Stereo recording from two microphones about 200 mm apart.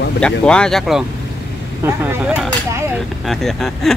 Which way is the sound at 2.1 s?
10° right (ahead or behind).